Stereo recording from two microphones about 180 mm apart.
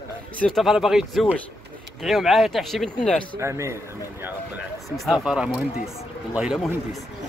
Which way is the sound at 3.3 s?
15° right (ahead or behind).